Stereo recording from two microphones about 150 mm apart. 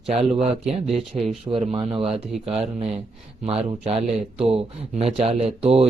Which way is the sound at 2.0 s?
Centre (ahead or behind).